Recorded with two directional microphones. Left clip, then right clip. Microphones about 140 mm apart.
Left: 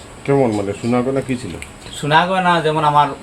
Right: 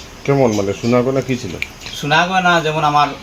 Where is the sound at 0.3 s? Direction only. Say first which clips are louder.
Right 1 dB; 70° right (ahead or behind).